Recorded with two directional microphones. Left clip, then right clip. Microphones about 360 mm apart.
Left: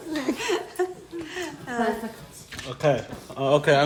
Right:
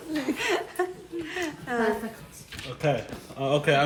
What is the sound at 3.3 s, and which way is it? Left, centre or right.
Speech, left.